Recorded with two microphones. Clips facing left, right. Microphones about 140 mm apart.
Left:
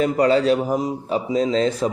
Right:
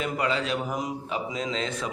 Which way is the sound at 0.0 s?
40° left (ahead or behind).